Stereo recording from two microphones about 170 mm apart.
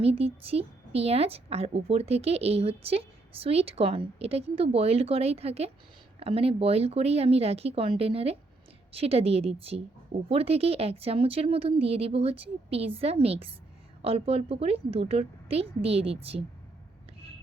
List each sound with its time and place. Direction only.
0.0 s a woman's voice: 35° right (ahead or behind)